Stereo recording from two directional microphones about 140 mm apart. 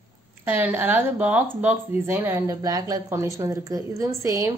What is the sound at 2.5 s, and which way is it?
A woman's voice, 25° right (ahead or behind).